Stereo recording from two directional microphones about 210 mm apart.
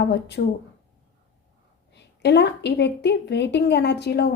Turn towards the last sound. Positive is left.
turn(degrees=50)  # may be behind; listen again after turning